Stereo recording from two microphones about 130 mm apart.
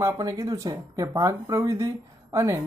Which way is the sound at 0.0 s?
25° right (ahead or behind).